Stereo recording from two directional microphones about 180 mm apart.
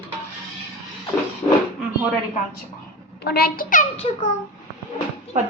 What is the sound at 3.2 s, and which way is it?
Speech, 60° left (ahead or behind).